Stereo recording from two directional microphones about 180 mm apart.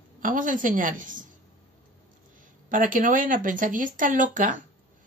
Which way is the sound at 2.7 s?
45° right (ahead or behind).